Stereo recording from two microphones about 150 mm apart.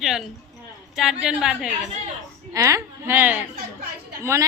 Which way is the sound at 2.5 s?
20° right (ahead or behind).